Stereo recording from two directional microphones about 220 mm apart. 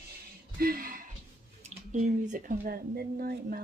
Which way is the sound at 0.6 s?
40° right (ahead or behind).